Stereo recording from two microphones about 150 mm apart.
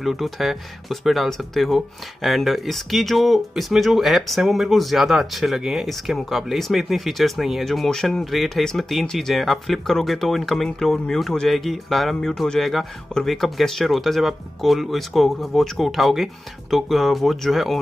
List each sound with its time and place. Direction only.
0.0 s speech: centre (ahead or behind)